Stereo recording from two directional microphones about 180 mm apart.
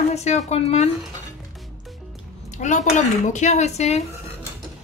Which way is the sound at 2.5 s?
40° left (ahead or behind).